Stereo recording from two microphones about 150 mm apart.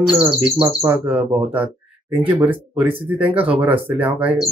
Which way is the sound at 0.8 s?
15° right (ahead or behind).